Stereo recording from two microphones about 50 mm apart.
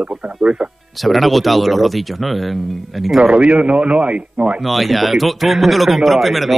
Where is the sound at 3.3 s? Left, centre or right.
Right.